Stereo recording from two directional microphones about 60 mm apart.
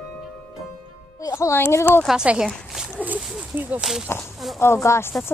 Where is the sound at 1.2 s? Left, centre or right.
Left.